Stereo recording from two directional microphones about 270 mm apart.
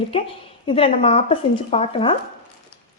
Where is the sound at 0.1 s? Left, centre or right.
Centre.